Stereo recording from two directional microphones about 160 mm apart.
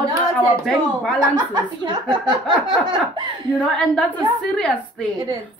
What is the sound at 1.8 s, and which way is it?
Speech, 30° right (ahead or behind).